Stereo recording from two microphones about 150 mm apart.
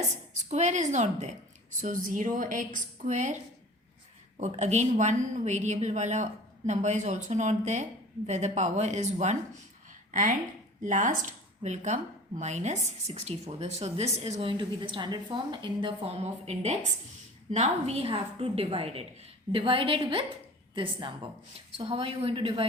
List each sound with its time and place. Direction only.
0.4 s speech: 50° right (ahead or behind)
1.8 s a woman's voice: 60° right (ahead or behind)
10.1 s a woman's voice: 60° right (ahead or behind); by 22.6 s 35° right (ahead or behind)